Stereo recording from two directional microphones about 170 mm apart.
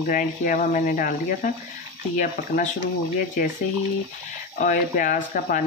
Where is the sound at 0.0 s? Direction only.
50° left (ahead or behind).